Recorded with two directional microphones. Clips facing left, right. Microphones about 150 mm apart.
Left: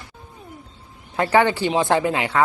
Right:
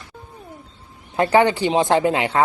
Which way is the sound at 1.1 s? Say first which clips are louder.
Right 2 dB; 20° right (ahead or behind).